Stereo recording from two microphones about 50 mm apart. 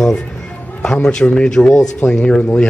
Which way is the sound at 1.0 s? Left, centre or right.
Centre.